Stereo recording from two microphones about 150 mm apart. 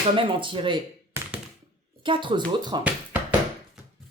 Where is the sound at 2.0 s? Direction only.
35° right (ahead or behind).